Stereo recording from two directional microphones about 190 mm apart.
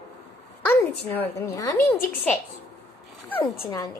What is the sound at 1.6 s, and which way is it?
Speech, 15° left (ahead or behind).